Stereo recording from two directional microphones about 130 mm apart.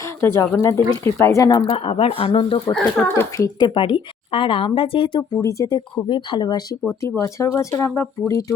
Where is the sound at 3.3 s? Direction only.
30° left (ahead or behind).